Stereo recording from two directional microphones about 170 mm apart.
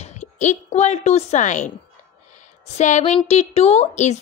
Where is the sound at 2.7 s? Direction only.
45° left (ahead or behind).